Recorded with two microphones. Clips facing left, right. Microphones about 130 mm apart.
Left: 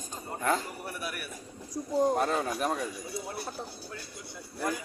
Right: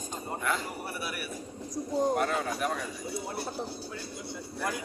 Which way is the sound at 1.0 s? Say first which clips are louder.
Left 1 dB; 5° right (ahead or behind).